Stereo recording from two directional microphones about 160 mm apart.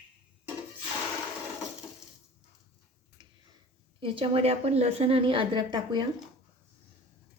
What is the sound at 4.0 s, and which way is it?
A woman's voice, 30° right (ahead or behind).